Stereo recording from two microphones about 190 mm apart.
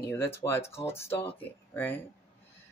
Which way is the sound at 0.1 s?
15° left (ahead or behind).